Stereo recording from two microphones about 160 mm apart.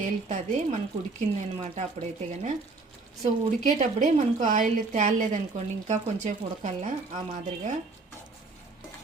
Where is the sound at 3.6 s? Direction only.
50° right (ahead or behind).